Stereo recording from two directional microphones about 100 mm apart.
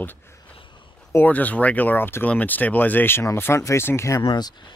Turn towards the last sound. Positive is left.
turn(degrees=45)  # may be behind; listen again after turning